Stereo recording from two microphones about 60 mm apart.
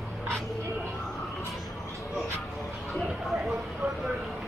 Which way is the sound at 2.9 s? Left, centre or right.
Centre.